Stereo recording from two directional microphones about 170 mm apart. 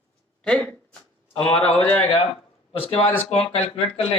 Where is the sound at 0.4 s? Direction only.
5° left (ahead or behind).